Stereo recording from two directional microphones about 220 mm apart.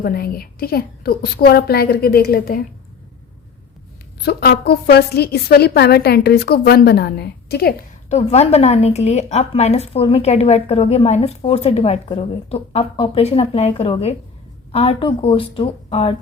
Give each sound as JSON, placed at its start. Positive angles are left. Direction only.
{"t": 0.0, "sound": "a woman's voice", "side_deg": 45}
{"t": 4.2, "sound": "a woman's voice", "side_deg": 45}
{"t": 8.1, "sound": "a woman's voice", "side_deg": 30}